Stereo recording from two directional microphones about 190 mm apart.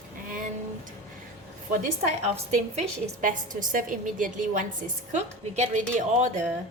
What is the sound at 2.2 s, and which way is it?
A woman's voice, 35° right (ahead or behind).